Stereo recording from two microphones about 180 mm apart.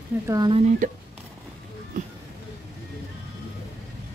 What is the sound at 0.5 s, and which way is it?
Speech, 45° right (ahead or behind).